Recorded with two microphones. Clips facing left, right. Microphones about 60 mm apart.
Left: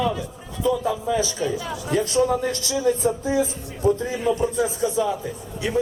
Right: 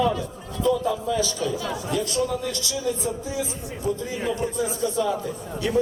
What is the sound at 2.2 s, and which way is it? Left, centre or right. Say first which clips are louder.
Speech: left 4 dB; left.